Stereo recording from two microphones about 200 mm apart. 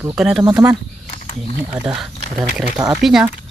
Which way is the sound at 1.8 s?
5° right (ahead or behind).